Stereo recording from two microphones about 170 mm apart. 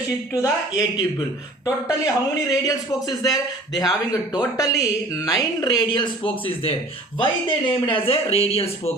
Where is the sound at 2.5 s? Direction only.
20° left (ahead or behind).